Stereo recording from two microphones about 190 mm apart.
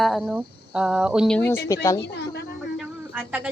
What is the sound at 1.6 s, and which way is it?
Speech, 15° left (ahead or behind).